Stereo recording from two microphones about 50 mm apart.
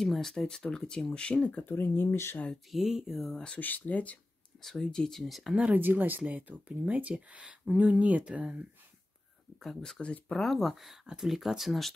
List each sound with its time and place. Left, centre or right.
0.0 s speech: centre; by 1.7 s left
1.7 s speech: left
2.7 s speech: centre
3.5 s speech: left
4.6 s speech: centre
5.2 s speech: centre
5.7 s speech: right
9.6 s speech: centre
10.1 s speech: left
10.4 s speech: centre